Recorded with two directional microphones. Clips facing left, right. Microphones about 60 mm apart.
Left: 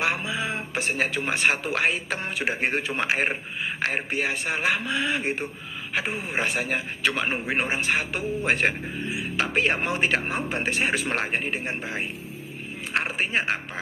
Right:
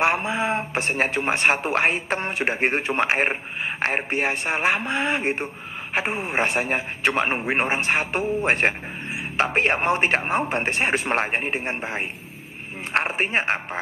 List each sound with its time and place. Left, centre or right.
0.0 s a man's voice: right